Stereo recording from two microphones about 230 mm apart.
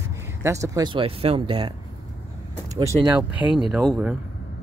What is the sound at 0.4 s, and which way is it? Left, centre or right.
Speech, centre.